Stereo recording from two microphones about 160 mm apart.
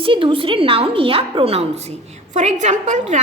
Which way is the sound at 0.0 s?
35° right (ahead or behind).